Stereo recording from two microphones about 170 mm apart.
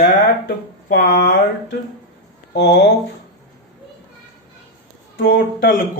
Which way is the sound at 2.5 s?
90° left.